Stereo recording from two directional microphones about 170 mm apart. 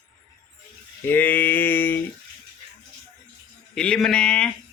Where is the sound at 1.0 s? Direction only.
10° left (ahead or behind).